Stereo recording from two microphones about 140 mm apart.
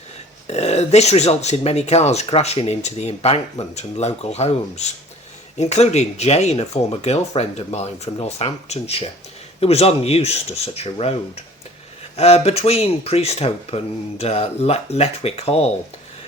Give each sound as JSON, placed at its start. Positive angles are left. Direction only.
{"t": 0.4, "sound": "speech", "side_deg": 50}